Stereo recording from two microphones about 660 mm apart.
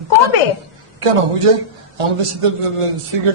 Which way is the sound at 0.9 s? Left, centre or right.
Right.